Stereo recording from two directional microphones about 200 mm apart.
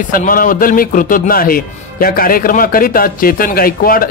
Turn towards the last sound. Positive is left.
turn(degrees=45)  # may be behind; listen again after turning